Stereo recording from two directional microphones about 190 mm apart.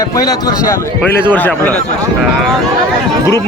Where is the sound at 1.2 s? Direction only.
10° left (ahead or behind).